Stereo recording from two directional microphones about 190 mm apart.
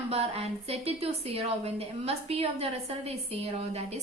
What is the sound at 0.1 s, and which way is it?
A woman's voice, 35° right (ahead or behind).